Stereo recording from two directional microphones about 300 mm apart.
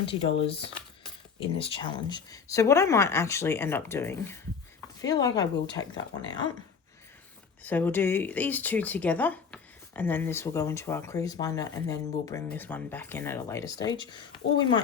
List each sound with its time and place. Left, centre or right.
0.0 s speech: centre
7.6 s speech: centre